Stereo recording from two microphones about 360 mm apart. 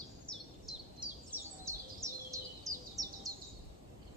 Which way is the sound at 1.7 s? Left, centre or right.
Centre.